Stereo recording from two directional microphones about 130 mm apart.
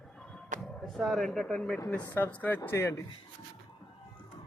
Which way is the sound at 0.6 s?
5° left (ahead or behind).